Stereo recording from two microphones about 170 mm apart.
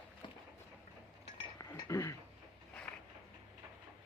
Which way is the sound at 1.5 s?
20° left (ahead or behind).